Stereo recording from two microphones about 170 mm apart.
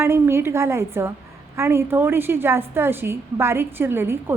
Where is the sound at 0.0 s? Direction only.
15° right (ahead or behind).